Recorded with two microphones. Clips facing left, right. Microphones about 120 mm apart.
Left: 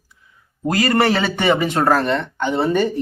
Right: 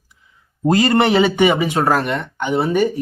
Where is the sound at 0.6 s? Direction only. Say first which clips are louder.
Right 2 dB; 25° right (ahead or behind).